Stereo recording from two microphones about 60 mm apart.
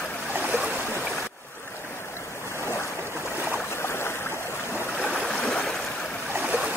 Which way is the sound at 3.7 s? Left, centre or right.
Left.